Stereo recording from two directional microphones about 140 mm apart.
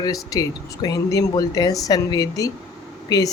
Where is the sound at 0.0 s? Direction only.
25° left (ahead or behind).